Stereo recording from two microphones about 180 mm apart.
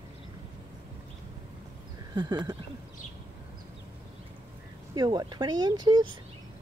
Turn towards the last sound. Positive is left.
turn(degrees=-25)  # may be behind; listen again after turning